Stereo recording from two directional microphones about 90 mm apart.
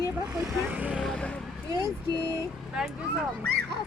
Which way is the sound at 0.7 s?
15° right (ahead or behind).